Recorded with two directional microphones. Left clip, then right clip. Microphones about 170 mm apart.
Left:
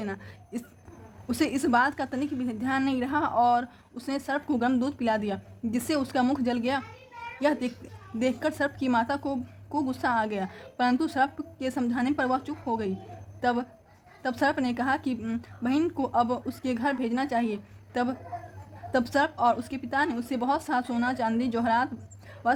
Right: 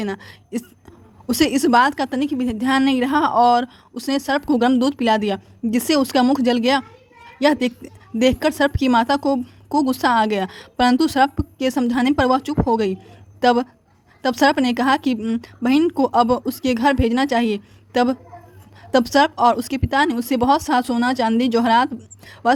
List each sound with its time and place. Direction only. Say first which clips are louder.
0.0 s a woman's voice: right 9 dB; 35° right (ahead or behind)